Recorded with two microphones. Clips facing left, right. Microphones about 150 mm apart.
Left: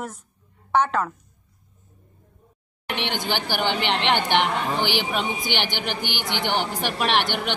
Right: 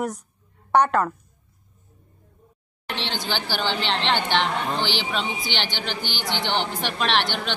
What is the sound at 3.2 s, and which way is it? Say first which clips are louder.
A woman's voice: left 1 dB; 15° left (ahead or behind).